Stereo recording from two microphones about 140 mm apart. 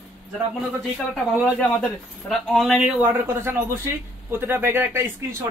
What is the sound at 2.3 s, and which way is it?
A woman's voice, centre (ahead or behind).